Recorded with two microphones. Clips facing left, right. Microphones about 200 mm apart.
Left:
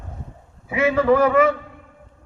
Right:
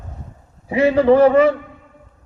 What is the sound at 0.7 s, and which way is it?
Speech, 30° right (ahead or behind).